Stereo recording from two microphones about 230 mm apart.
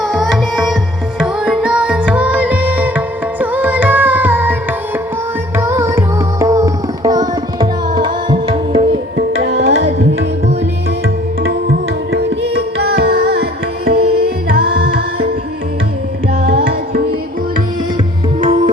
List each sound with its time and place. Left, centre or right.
0.0 s tabla: centre
1.2 s music: centre
5.5 s music: centre
9.6 s tabla: right
11.4 s music: right
16.5 s music: right
18.3 s tabla: right